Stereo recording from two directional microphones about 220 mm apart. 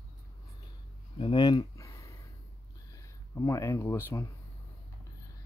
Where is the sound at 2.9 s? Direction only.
15° left (ahead or behind).